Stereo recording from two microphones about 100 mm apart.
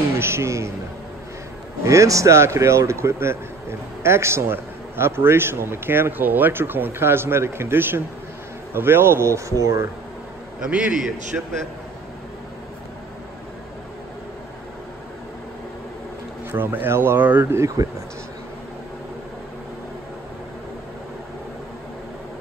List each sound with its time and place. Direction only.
0.2 s a man's voice: 25° right (ahead or behind)
1.9 s a man's voice: 30° right (ahead or behind)
10.6 s a man's voice: 10° right (ahead or behind)
16.5 s a man's voice: 20° right (ahead or behind)